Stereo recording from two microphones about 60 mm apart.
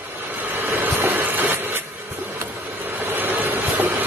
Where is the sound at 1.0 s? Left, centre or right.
Right.